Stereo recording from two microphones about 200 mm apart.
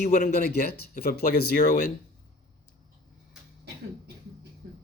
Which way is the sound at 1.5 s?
40° left (ahead or behind).